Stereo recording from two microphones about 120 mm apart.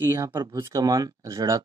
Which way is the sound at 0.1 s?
20° right (ahead or behind).